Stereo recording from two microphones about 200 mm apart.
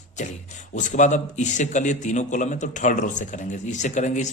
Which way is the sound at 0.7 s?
40° left (ahead or behind).